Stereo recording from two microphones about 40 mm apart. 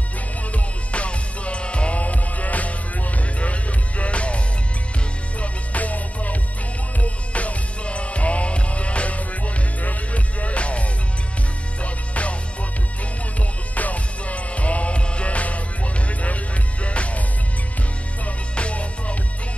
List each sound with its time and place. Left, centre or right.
0.5 s music: left
4.0 s music: left
5.4 s music: left
13.7 s music: left
18.5 s music: left